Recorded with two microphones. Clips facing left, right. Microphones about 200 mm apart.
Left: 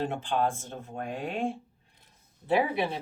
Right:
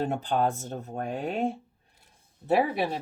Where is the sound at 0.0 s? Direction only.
40° right (ahead or behind).